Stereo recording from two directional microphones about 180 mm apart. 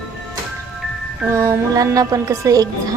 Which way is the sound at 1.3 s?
15° right (ahead or behind).